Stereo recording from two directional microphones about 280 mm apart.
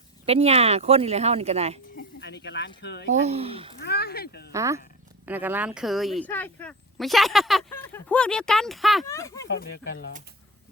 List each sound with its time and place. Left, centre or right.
0.3 s speech: right
2.0 s speech: left
3.1 s speech: right
3.8 s speech: left
4.5 s speech: centre
9.0 s speech: centre
9.5 s speech: left